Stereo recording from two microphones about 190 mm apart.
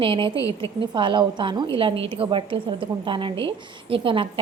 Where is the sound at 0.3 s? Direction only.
15° left (ahead or behind).